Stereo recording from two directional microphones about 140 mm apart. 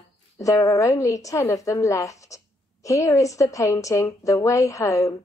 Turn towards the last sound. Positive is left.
turn(degrees=20)  # may be behind; listen again after turning